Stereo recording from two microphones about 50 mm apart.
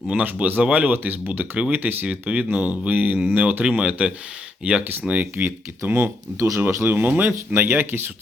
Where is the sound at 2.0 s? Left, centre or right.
Right.